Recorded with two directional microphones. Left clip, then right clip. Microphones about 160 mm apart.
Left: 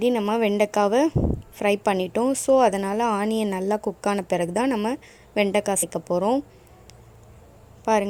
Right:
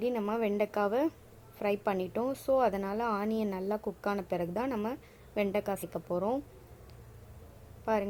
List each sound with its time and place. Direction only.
0.0 s a woman's voice: 45° left (ahead or behind)
7.9 s a woman's voice: 45° left (ahead or behind)